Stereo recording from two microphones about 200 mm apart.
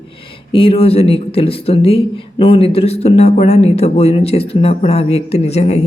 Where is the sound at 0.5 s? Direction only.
25° left (ahead or behind).